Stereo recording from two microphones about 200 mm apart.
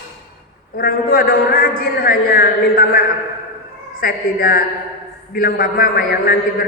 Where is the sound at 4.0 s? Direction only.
45° left (ahead or behind).